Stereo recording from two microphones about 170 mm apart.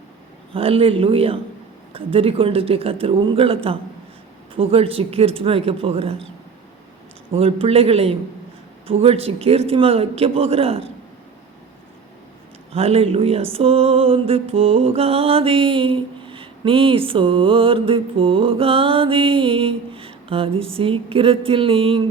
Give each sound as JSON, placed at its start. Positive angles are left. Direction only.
{"t": 0.5, "sound": "music", "side_deg": -35}
{"t": 7.3, "sound": "music", "side_deg": -35}
{"t": 12.7, "sound": "music", "side_deg": -35}